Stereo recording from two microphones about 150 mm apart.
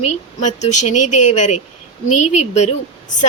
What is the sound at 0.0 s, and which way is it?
Speech, 50° left (ahead or behind).